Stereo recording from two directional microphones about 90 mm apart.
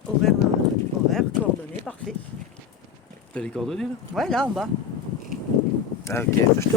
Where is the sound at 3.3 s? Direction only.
5° left (ahead or behind).